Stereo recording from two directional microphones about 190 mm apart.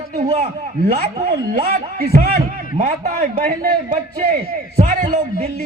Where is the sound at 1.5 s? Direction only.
50° right (ahead or behind).